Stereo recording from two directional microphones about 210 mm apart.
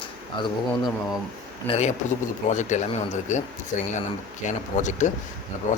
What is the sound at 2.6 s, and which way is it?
Speech, 35° left (ahead or behind).